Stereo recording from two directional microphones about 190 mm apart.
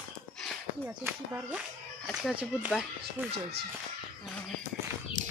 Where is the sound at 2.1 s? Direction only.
5° right (ahead or behind).